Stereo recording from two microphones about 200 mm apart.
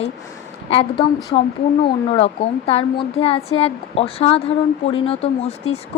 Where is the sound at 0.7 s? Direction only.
25° left (ahead or behind).